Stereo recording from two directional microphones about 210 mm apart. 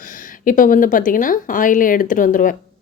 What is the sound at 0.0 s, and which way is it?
Speech, 40° left (ahead or behind).